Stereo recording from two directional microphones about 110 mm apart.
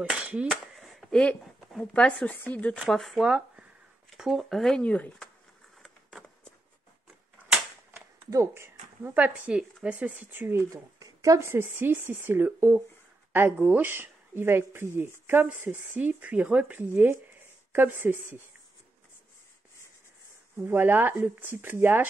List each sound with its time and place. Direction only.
0.1 s a woman's voice: 10° right (ahead or behind)
0.7 s a sound: centre (ahead or behind)
1.7 s speech: 5° left (ahead or behind)
2.8 s speech: centre (ahead or behind)
5.8 s a sound: centre (ahead or behind)
7.9 s a woman's voice: 25° right (ahead or behind)
20.5 s speech: 20° right (ahead or behind)